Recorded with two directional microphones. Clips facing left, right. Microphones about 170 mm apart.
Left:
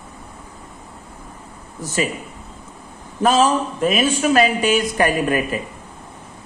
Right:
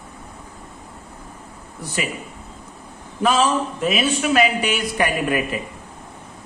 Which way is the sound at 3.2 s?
45° left (ahead or behind).